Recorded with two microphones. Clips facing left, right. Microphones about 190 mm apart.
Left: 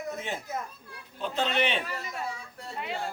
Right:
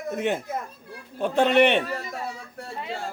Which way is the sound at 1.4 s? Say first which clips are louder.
Right 10 dB; 65° right (ahead or behind).